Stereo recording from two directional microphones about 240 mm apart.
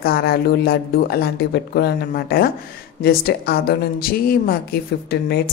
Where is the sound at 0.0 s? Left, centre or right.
Left.